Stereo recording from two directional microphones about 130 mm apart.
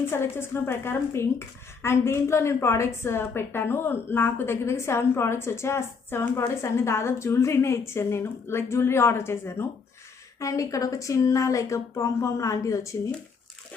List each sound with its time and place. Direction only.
0.1 s speech: 20° left (ahead or behind)